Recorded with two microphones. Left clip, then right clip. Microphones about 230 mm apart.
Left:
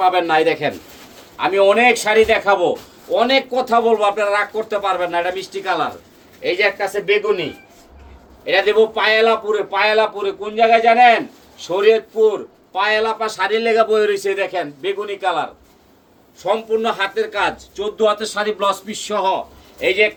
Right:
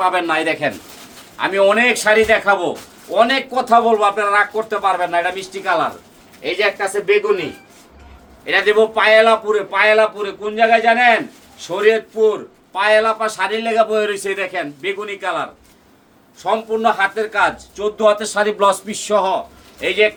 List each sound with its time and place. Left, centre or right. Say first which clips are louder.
0.0 s speech: left 2 dB; right
8.4 s speech: even; right